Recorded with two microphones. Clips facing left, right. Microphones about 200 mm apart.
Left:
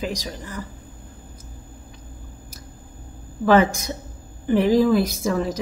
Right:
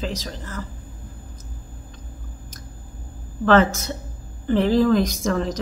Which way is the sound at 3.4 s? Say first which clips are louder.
Even; 10° left (ahead or behind).